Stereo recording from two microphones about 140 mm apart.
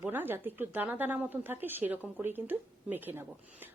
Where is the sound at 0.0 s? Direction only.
15° right (ahead or behind).